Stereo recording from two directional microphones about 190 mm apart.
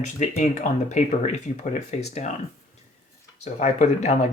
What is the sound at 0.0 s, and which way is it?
Speech, 40° left (ahead or behind).